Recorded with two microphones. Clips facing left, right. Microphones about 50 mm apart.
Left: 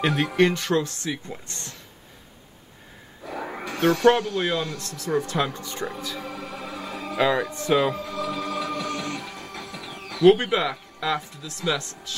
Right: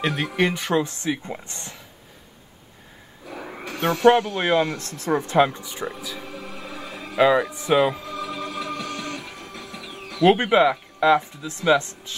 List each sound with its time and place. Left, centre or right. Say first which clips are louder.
0.0 s speech: left 2 dB; centre
3.8 s speech: right 2 dB; centre; by 5.1 s right
5.1 s speech: right 5 dB; right
5.6 s music: even; centre
10.2 s speech: right 1 dB; right